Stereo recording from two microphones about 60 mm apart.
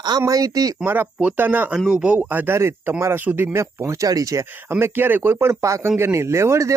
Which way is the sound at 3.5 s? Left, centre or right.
Right.